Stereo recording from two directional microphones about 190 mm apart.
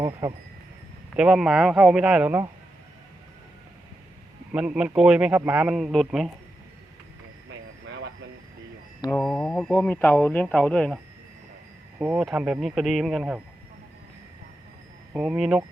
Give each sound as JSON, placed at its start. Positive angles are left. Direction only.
{"t": 0.0, "sound": "speech", "side_deg": -20}
{"t": 1.1, "sound": "a man's voice", "side_deg": -5}
{"t": 4.5, "sound": "a man's voice", "side_deg": -5}
{"t": 7.9, "sound": "vehicle", "side_deg": -65}
{"t": 9.0, "sound": "a man's voice", "side_deg": 5}
{"t": 11.9, "sound": "a man's voice", "side_deg": -10}
{"t": 15.1, "sound": "a man's voice", "side_deg": -5}